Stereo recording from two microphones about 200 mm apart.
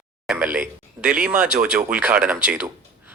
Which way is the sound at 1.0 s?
5° right (ahead or behind).